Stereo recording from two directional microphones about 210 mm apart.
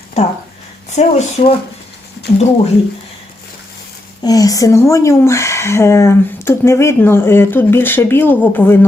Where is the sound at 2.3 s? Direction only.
35° left (ahead or behind).